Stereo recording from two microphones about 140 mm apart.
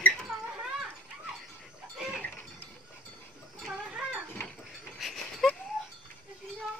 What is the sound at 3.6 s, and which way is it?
Goat, 5° right (ahead or behind).